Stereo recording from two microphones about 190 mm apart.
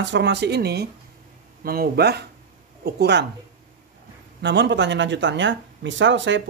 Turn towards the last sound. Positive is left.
turn(degrees=-75)  # may be behind; listen again after turning